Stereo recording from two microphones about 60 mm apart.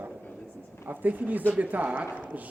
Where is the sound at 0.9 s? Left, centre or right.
Right.